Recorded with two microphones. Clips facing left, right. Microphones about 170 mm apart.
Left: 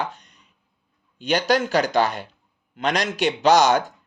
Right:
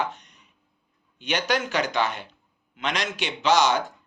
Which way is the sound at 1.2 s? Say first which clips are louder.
Left 5 dB; 35° left (ahead or behind).